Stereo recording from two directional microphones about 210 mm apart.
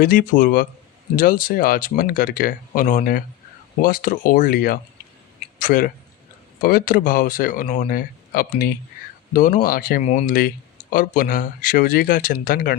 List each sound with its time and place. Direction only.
0.0 s speech: 40° left (ahead or behind)